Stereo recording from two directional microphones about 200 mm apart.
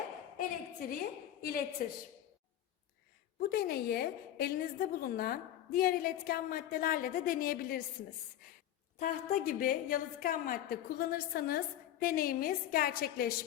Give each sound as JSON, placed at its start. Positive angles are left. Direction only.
{"t": 0.3, "sound": "a sound", "side_deg": 45}
{"t": 3.4, "sound": "a woman's voice", "side_deg": 50}
{"t": 9.0, "sound": "a woman's voice", "side_deg": 40}